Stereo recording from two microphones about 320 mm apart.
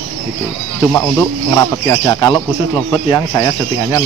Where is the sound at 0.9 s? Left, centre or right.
Centre.